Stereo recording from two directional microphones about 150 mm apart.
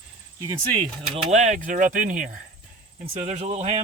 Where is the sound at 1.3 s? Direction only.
55° right (ahead or behind).